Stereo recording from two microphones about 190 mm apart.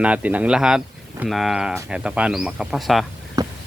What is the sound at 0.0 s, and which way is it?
Speech, 5° right (ahead or behind).